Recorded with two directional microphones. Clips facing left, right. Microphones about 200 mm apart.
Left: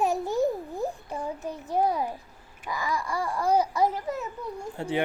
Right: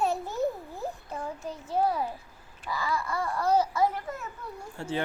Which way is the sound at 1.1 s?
20° left (ahead or behind).